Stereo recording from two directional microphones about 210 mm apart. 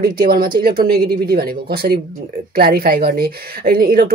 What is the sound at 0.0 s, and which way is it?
Speech, 45° right (ahead or behind).